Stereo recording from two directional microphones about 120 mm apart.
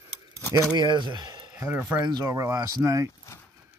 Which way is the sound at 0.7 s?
40° right (ahead or behind).